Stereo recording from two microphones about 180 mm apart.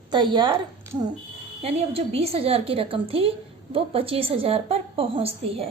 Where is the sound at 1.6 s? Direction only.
35° right (ahead or behind).